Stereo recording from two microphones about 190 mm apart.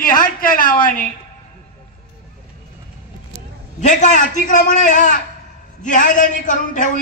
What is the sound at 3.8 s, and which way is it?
A man's voice, 40° left (ahead or behind).